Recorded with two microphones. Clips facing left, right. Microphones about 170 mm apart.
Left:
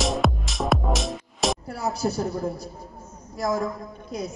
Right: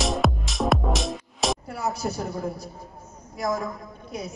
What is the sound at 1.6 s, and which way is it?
Speech, 35° left (ahead or behind).